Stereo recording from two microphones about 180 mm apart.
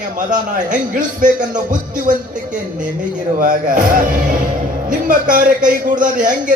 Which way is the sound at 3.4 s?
45° right (ahead or behind).